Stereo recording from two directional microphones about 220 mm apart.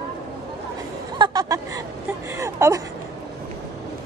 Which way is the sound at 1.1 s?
20° right (ahead or behind).